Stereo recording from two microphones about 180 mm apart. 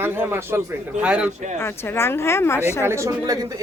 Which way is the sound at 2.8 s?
15° right (ahead or behind).